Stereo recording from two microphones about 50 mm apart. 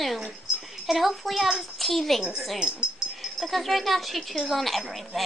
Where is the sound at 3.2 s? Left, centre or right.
Centre.